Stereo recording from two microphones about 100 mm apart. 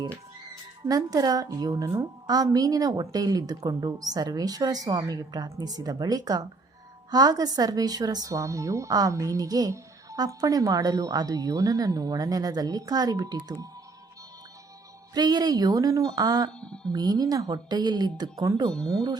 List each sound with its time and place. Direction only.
0.9 s speech: 40° right (ahead or behind)
15.1 s speech: 40° right (ahead or behind)
16.5 s speech: 10° left (ahead or behind)
16.9 s speech: 40° right (ahead or behind)
18.7 s speech: 5° left (ahead or behind)